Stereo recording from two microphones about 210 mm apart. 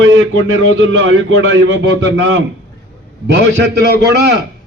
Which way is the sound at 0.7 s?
60° right (ahead or behind).